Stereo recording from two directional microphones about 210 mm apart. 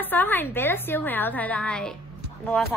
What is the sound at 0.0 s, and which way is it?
A woman's voice, 10° left (ahead or behind).